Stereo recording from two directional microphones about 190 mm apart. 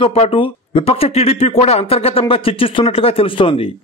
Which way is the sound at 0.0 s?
30° left (ahead or behind).